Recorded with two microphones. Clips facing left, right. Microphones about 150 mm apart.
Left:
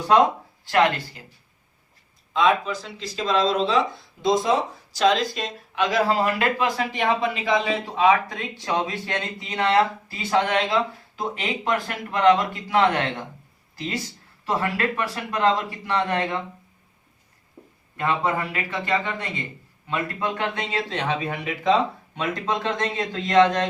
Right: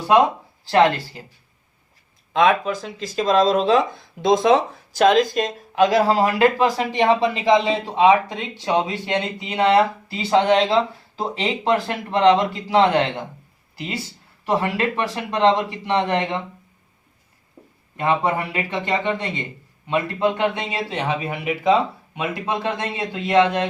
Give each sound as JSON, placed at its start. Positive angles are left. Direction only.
{"t": 0.7, "sound": "speech", "side_deg": -30}
{"t": 2.3, "sound": "speech", "side_deg": -60}
{"t": 10.2, "sound": "speech", "side_deg": -30}
{"t": 13.7, "sound": "speech", "side_deg": -15}
{"t": 17.9, "sound": "speech", "side_deg": -20}